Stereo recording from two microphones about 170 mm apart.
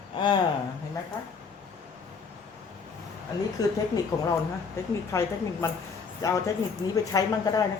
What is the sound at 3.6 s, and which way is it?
Speech, 20° left (ahead or behind).